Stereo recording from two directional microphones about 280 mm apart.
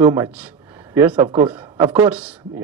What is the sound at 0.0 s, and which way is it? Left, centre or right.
Speech, centre.